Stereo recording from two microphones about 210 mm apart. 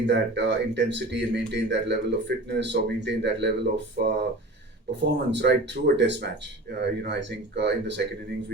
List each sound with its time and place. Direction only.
0.0 s speech: 55° right (ahead or behind)